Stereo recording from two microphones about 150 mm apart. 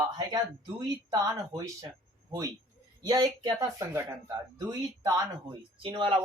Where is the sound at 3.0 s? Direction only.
25° right (ahead or behind).